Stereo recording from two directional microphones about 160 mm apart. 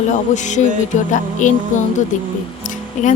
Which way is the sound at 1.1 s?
50° left (ahead or behind).